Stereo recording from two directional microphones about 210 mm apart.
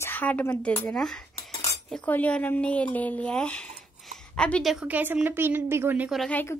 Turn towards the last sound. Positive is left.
turn(degrees=10)  # may be behind; listen again after turning